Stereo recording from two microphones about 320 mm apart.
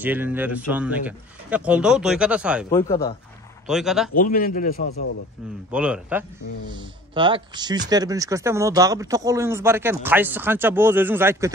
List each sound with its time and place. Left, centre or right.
0.0 s speech: centre
2.7 s speech: centre
4.1 s a man's voice: left
5.7 s speech: centre
6.8 s speech: centre